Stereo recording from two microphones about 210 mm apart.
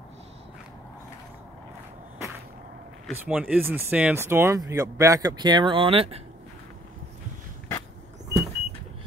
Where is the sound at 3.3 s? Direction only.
5° right (ahead or behind); by 6.2 s 25° right (ahead or behind).